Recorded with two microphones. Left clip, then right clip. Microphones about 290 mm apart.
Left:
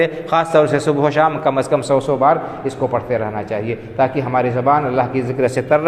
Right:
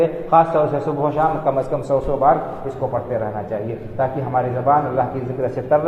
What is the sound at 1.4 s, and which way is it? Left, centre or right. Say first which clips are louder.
Speech: left 4 dB; left.